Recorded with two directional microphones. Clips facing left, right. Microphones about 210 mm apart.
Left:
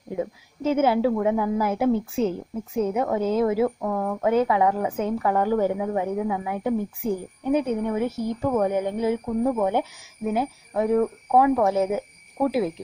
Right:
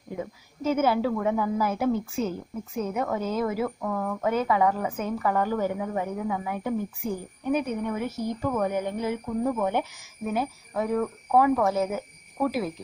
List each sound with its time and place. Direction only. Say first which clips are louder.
0.2 s a woman's voice: left 5 dB; 20° left (ahead or behind)